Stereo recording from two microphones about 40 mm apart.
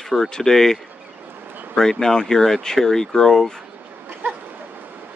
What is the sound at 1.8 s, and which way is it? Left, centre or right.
Speech, centre.